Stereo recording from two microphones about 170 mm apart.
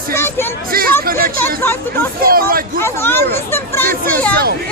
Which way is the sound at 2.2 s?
60° right (ahead or behind).